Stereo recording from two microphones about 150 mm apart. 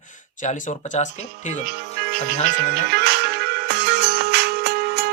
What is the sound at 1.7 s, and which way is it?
Speech, 90° right.